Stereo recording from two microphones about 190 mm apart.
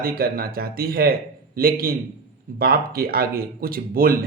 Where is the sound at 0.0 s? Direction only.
50° right (ahead or behind).